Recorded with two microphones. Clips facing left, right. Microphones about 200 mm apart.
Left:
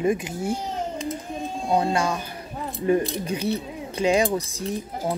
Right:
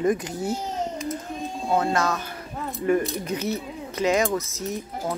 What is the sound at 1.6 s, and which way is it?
Speech, 15° left (ahead or behind).